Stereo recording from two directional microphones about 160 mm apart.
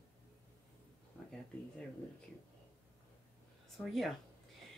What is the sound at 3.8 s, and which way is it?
Speech, centre (ahead or behind).